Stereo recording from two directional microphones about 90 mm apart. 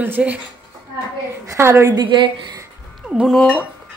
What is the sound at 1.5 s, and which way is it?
Speech, 30° right (ahead or behind).